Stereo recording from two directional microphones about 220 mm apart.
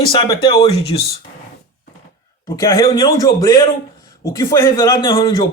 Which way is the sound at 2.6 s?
15° left (ahead or behind).